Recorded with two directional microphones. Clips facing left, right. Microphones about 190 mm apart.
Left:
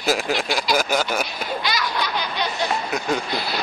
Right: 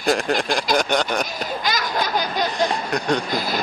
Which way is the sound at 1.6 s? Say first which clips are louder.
Right 3 dB; 45° right (ahead or behind).